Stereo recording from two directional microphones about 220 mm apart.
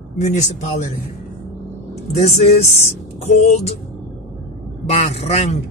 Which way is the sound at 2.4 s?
30° left (ahead or behind).